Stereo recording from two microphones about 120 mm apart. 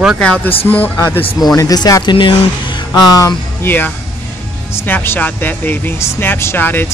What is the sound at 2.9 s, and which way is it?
Speech, 30° left (ahead or behind).